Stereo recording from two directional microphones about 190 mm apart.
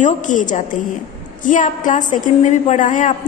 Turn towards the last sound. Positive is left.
turn(degrees=45)  # may be behind; listen again after turning